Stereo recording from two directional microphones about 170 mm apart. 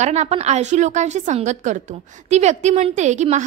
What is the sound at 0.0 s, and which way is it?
A woman's voice, 40° right (ahead or behind).